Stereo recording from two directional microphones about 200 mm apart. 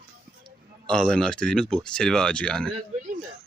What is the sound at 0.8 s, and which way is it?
Speech, 5° left (ahead or behind).